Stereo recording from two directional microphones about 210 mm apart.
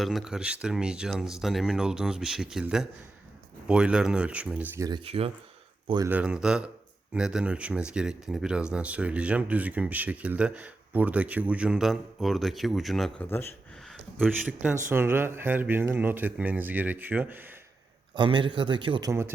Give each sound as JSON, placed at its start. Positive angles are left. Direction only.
{"t": 0.0, "sound": "speech", "side_deg": 0}
{"t": 4.9, "sound": "a man's voice", "side_deg": -25}
{"t": 6.1, "sound": "speech", "side_deg": -5}
{"t": 13.9, "sound": "speech", "side_deg": -5}
{"t": 18.2, "sound": "a man's voice", "side_deg": -20}